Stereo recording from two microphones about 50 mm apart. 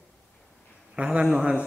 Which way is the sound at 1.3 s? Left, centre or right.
Centre.